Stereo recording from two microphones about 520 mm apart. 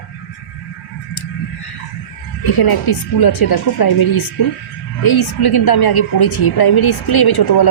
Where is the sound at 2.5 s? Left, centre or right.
Left.